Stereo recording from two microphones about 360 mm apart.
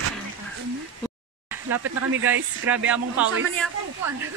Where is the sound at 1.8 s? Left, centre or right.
Right.